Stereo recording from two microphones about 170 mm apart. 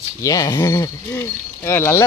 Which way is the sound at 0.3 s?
20° left (ahead or behind).